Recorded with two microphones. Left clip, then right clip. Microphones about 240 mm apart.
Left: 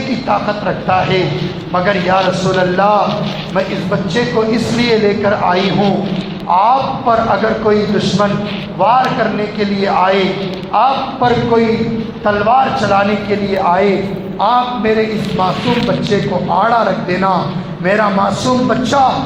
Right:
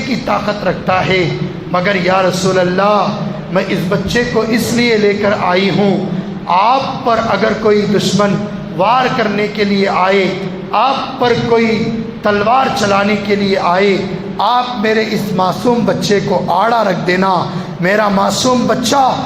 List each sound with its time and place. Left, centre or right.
0.3 s a man's voice: right
8.8 s a man's voice: right